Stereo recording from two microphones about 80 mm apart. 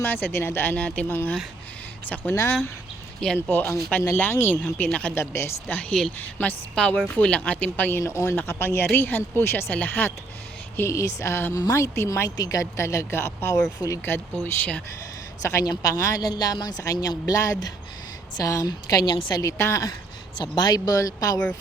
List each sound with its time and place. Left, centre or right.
0.0 s speech: left
3.2 s speech: centre
4.1 s speech: left
5.1 s speech: left
5.9 s speech: centre
6.1 s speech: left
10.8 s speech: left
12.4 s speech: left
14.0 s speech: left
15.4 s a woman's voice: left
19.1 s a woman's voice: left
19.4 s a woman's voice: left
20.4 s speech: left